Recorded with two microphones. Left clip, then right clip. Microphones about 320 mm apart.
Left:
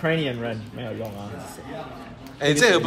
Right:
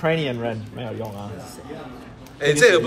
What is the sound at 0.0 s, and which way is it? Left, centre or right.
Speech, centre.